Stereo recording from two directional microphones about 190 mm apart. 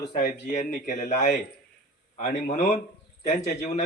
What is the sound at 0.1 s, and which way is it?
Speech, 45° left (ahead or behind).